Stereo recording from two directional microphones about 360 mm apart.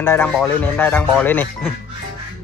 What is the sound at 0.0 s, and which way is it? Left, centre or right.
Speech, centre.